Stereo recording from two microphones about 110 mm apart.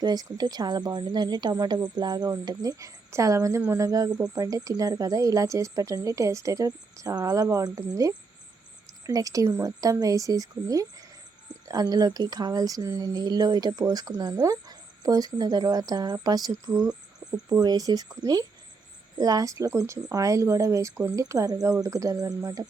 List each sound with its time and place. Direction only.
0.0 s speech: 35° right (ahead or behind)